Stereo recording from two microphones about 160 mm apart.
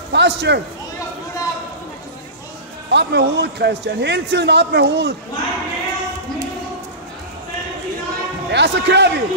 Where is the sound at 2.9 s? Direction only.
90° right.